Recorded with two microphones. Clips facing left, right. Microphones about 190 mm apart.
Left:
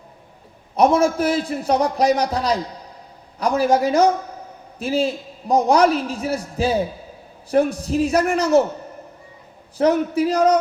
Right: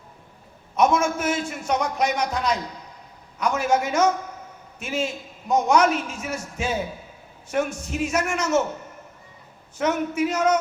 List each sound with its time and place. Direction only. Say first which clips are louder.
0.8 s a man's voice: left 5 dB; 35° left (ahead or behind)
9.7 s a man's voice: left 6 dB; 35° left (ahead or behind)